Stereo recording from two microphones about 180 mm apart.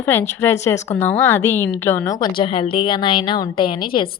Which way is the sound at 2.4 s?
30° left (ahead or behind).